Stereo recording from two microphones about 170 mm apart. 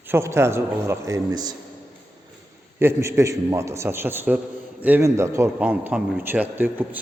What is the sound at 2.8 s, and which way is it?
A man's voice, 15° right (ahead or behind).